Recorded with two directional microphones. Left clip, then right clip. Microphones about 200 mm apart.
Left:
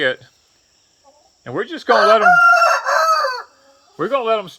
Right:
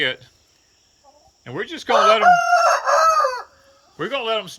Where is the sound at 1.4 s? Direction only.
25° left (ahead or behind).